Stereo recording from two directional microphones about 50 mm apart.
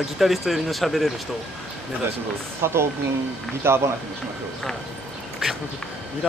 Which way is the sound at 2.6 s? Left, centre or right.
Right.